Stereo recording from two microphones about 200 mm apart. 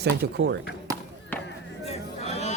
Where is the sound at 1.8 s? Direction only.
30° left (ahead or behind).